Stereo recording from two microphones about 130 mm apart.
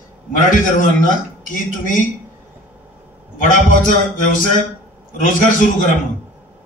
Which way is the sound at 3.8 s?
90° left.